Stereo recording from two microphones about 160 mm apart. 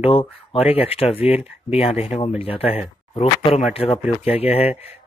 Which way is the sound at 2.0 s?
40° left (ahead or behind).